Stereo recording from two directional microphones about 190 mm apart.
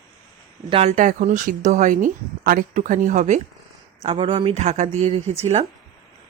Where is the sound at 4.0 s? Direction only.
30° right (ahead or behind).